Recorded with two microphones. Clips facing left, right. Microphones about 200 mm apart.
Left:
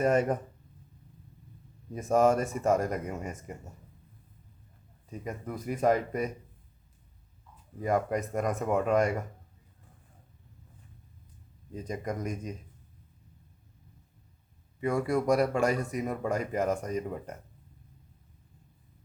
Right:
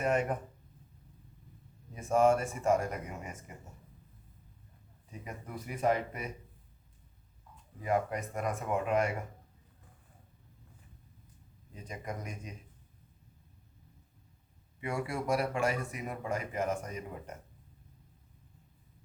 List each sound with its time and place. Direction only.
0.0 s speech: 40° left (ahead or behind)
1.9 s speech: 40° left (ahead or behind)
5.2 s speech: 45° left (ahead or behind)
7.8 s speech: 45° left (ahead or behind)
11.7 s speech: 40° left (ahead or behind)
14.8 s speech: 40° left (ahead or behind)